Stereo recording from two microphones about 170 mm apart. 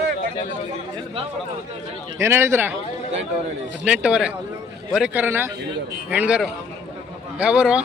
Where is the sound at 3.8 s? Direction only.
5° right (ahead or behind).